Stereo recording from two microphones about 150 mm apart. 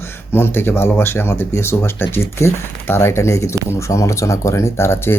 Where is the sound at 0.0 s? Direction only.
15° left (ahead or behind).